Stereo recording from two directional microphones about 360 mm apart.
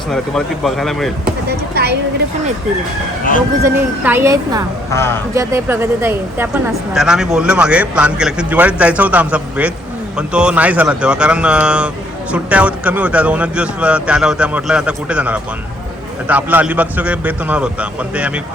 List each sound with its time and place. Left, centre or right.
0.1 s a woman's voice: centre
1.2 s speech: right
3.6 s speech: centre
4.9 s speech: centre
5.3 s a woman's voice: centre